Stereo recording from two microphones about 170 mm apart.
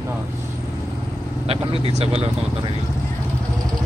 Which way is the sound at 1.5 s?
35° right (ahead or behind).